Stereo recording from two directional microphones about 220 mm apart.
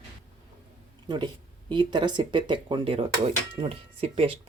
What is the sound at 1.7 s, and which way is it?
Speech, 20° right (ahead or behind).